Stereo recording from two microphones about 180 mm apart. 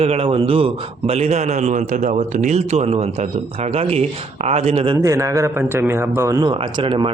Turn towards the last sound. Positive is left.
turn(degrees=-30)  # may be behind; listen again after turning